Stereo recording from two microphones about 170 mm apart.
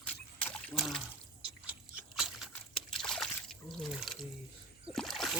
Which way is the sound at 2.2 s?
5° right (ahead or behind).